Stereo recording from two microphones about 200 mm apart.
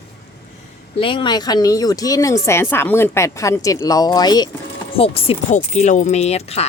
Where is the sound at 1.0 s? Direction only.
25° left (ahead or behind).